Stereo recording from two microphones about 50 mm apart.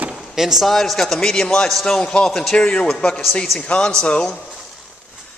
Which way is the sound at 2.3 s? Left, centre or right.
Centre.